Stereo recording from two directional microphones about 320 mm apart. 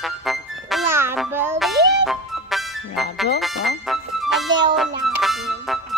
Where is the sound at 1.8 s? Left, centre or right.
Right.